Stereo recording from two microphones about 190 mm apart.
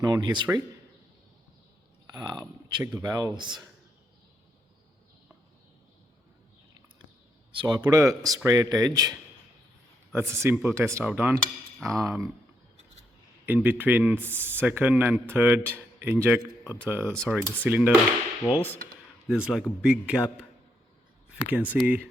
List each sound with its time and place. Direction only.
0.0 s speech: 20° right (ahead or behind)
2.1 s a sound: 20° right (ahead or behind)
3.0 s speech: 20° right (ahead or behind)
7.5 s a man's voice: 25° right (ahead or behind)
13.4 s a man's voice: 10° right (ahead or behind)
18.4 s a man's voice: centre (ahead or behind)
21.4 s a man's voice: 10° right (ahead or behind)